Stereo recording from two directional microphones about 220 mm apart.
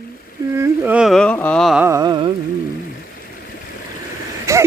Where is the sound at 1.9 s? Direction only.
15° right (ahead or behind).